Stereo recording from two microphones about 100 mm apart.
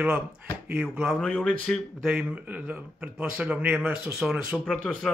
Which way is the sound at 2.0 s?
10° right (ahead or behind).